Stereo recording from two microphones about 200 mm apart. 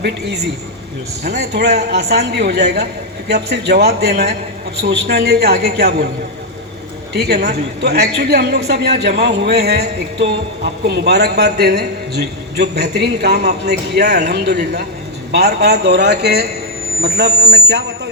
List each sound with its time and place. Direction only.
1.2 s a man's voice: 55° right (ahead or behind)
7.1 s a man's voice: 55° right (ahead or behind)